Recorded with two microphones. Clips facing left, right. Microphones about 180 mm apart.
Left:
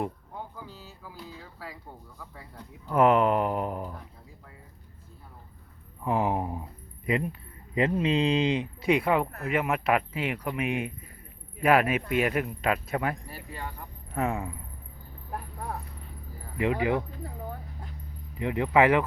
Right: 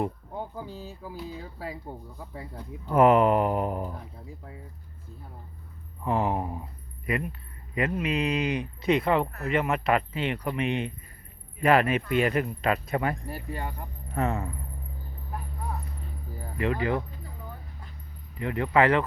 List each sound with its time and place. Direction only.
1.9 s speech: 25° right (ahead or behind)
2.9 s speech: 5° right (ahead or behind)
6.1 s speech: 15° left (ahead or behind)
8.8 s speech: 10° left (ahead or behind)
13.2 s speech: 45° right (ahead or behind)
14.1 s speech: 10° left (ahead or behind)
16.6 s speech: 15° left (ahead or behind)
18.3 s speech: 15° left (ahead or behind)